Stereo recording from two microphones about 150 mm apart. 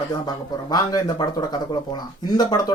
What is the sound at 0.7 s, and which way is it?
Speech, 25° left (ahead or behind).